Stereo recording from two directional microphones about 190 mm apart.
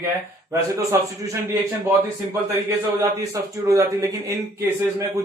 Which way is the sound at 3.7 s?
15° right (ahead or behind).